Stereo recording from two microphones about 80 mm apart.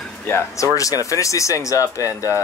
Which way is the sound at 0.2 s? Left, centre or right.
Left.